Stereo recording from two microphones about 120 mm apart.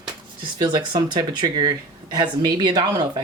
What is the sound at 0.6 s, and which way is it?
Speech, 40° right (ahead or behind).